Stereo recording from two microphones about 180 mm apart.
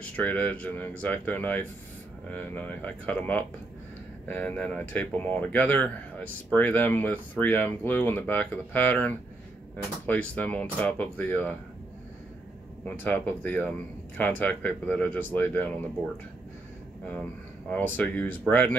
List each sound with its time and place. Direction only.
0.1 s speech: 10° left (ahead or behind)
12.8 s speech: 10° left (ahead or behind)
17.6 s speech: 10° left (ahead or behind)